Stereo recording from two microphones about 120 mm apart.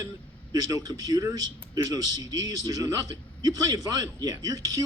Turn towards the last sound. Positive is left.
turn(degrees=-30)  # may be behind; listen again after turning